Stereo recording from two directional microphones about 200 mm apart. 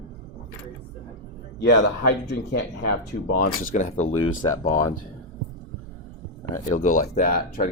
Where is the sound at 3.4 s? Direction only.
40° left (ahead or behind).